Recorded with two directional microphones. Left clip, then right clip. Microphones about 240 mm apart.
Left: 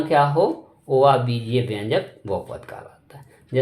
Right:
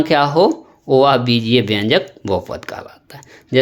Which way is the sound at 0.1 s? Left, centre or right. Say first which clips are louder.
Right 3 dB; right.